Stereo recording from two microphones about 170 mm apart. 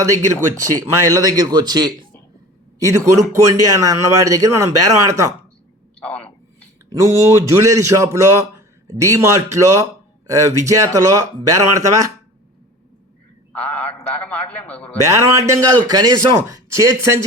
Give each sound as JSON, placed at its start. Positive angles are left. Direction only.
{"t": 0.0, "sound": "a man's voice", "side_deg": -20}
{"t": 6.9, "sound": "a man's voice", "side_deg": -20}
{"t": 13.5, "sound": "a sound", "side_deg": 10}
{"t": 14.5, "sound": "a man's voice", "side_deg": 10}
{"t": 15.0, "sound": "a man's voice", "side_deg": -15}